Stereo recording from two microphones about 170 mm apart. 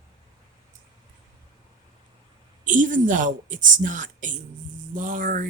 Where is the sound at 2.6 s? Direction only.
50° right (ahead or behind).